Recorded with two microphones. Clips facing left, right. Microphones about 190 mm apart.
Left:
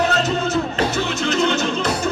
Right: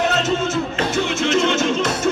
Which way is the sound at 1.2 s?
35° left (ahead or behind).